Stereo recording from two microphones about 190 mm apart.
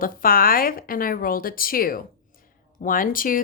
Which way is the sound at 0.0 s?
50° left (ahead or behind).